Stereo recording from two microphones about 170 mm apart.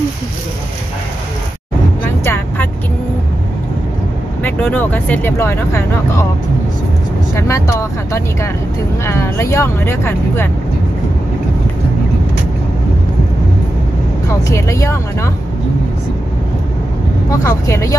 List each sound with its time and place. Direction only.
2.2 s vehicle: 15° left (ahead or behind)
4.4 s speech: 10° left (ahead or behind)
7.3 s speech: 15° left (ahead or behind)
14.5 s speech: 15° left (ahead or behind)
17.3 s speech: 20° left (ahead or behind)